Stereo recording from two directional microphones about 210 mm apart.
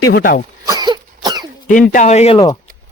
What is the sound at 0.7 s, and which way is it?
Cough, 20° right (ahead or behind).